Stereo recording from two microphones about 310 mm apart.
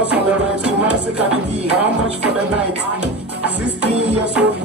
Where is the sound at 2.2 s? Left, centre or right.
Centre.